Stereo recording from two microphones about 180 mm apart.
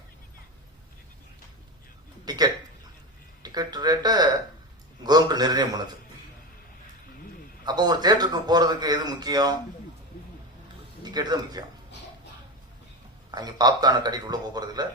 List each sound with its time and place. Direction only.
2.2 s a sound: 20° right (ahead or behind)
3.4 s speech: 20° right (ahead or behind)
5.0 s a sound: 20° right (ahead or behind)
7.6 s a man's voice: 25° right (ahead or behind)
11.0 s speech: 20° right (ahead or behind)
13.3 s a man's voice: 20° right (ahead or behind)